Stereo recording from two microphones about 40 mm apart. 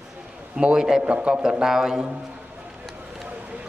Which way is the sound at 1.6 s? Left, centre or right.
Centre.